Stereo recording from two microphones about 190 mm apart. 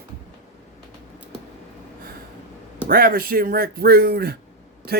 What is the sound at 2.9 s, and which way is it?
Speech, 50° right (ahead or behind).